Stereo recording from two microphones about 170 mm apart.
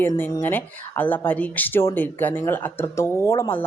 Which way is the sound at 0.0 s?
15° left (ahead or behind).